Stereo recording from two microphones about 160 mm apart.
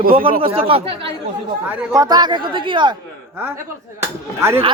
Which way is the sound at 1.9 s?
25° right (ahead or behind).